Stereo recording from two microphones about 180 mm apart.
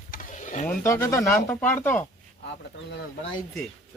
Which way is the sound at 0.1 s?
45° left (ahead or behind).